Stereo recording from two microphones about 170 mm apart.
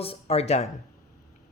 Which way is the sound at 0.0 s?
35° left (ahead or behind).